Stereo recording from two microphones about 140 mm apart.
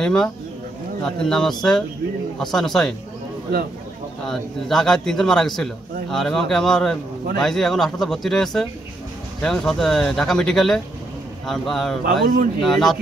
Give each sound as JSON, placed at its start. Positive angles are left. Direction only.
{"t": 0.0, "sound": "speech", "side_deg": 5}
{"t": 4.3, "sound": "speech", "side_deg": 5}
{"t": 12.0, "sound": "a man's voice", "side_deg": -90}
{"t": 12.6, "sound": "speech", "side_deg": 0}